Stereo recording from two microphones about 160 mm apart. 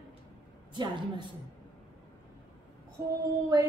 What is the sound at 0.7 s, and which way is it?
Female singing, 30° right (ahead or behind).